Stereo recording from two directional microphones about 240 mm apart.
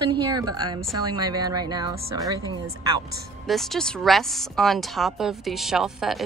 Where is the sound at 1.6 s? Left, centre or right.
Centre.